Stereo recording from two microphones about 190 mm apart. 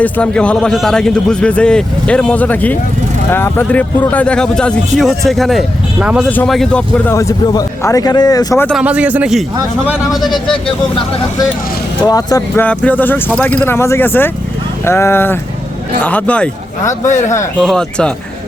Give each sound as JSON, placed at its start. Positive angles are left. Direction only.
{"t": 0.0, "sound": "speech", "side_deg": 5}
{"t": 6.2, "sound": "speech", "side_deg": 5}
{"t": 8.8, "sound": "a man's voice", "side_deg": -5}
{"t": 12.0, "sound": "speech", "side_deg": 20}
{"t": 12.6, "sound": "speech", "side_deg": 10}
{"t": 17.1, "sound": "speech", "side_deg": 40}
{"t": 17.6, "sound": "speech", "side_deg": 5}